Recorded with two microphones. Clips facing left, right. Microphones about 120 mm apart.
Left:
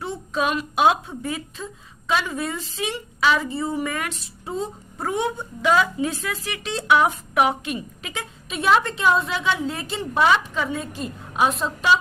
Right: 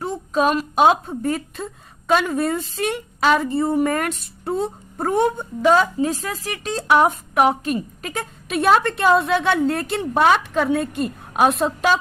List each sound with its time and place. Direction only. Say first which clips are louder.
0.0 s a woman's voice: right 5 dB; 40° right (ahead or behind)
4.2 s a woman's voice: right 5 dB; 65° right (ahead or behind)
5.6 s a woman's voice: right 4 dB; 35° right (ahead or behind)
8.4 s a woman's voice: right 3 dB; 60° right (ahead or behind)